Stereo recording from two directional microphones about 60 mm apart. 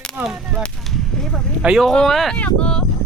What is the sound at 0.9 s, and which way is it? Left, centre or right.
Whip, centre.